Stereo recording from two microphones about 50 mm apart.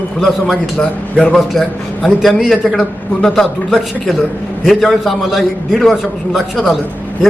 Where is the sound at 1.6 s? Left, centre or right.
Centre.